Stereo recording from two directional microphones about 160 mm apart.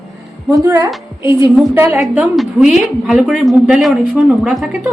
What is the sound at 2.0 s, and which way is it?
A woman's voice, centre (ahead or behind).